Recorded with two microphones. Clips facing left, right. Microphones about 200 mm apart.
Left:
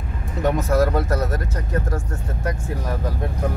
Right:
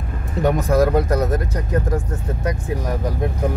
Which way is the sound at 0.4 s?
15° right (ahead or behind).